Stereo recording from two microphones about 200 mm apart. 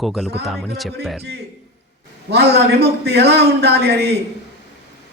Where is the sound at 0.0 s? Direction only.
Centre (ahead or behind).